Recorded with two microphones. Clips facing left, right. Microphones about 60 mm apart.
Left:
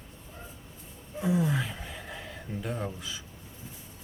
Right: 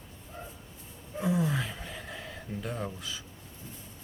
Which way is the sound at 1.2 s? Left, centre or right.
Centre.